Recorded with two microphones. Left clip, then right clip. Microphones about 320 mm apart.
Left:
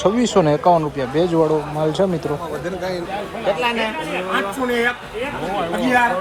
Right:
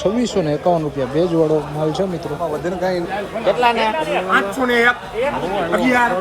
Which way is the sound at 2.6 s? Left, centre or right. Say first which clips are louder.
Right 4 dB; right.